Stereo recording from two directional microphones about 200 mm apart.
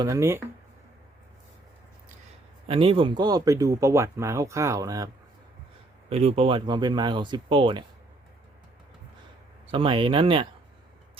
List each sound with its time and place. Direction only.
0.0 s speech: 15° right (ahead or behind)
2.6 s speech: 25° right (ahead or behind)
6.1 s speech: 30° right (ahead or behind)
9.6 s speech: 25° right (ahead or behind)